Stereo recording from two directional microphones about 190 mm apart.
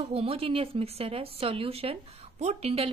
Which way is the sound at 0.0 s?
30° right (ahead or behind).